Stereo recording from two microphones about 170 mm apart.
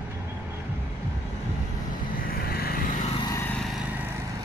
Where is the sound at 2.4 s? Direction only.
65° left (ahead or behind).